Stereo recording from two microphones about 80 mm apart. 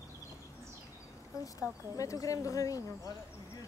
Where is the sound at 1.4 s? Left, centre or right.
Left.